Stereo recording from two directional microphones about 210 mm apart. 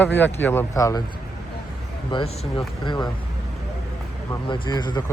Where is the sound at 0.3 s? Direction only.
10° left (ahead or behind).